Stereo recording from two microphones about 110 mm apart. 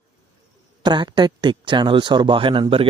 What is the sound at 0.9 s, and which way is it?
Speech, 45° right (ahead or behind).